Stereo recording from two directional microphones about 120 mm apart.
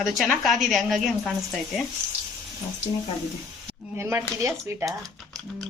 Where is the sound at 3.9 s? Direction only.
20° right (ahead or behind).